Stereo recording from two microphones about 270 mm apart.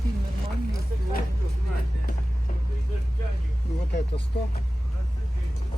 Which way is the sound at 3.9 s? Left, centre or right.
Left.